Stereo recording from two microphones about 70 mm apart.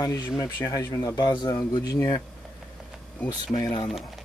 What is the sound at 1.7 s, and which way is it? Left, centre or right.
Speech, left.